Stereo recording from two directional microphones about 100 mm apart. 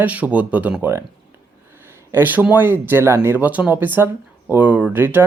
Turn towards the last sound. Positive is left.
turn(degrees=-20)  # may be behind; listen again after turning